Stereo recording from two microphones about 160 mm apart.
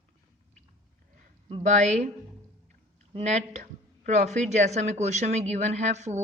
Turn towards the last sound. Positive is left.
turn(degrees=-45)  # may be behind; listen again after turning